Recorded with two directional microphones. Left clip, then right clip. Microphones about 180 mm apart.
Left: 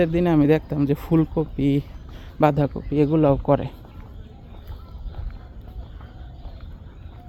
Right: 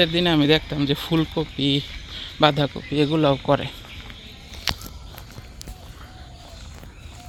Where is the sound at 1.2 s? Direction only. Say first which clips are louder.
Left 1 dB; 10° left (ahead or behind).